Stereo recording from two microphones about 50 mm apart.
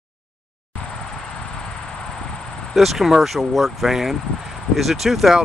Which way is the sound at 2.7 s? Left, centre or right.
Centre.